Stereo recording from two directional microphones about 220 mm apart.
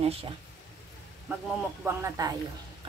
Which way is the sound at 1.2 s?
5° right (ahead or behind).